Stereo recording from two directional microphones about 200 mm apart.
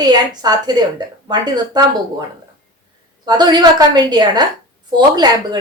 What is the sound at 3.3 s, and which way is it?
A woman's voice, 20° right (ahead or behind).